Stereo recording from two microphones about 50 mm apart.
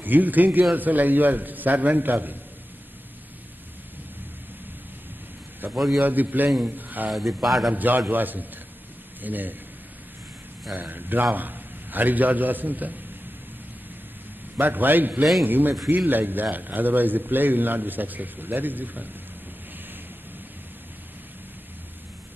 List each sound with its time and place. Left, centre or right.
0.0 s a man's voice: right
5.6 s a man's voice: right
7.1 s speech: centre
7.7 s a man's voice: right
10.7 s a man's voice: right
14.6 s a man's voice: right